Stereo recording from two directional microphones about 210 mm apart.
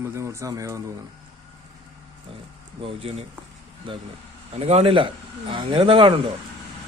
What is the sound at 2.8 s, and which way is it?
Speech, 30° right (ahead or behind).